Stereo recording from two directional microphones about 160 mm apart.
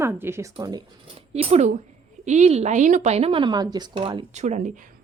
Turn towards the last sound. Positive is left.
turn(degrees=-45)  # may be behind; listen again after turning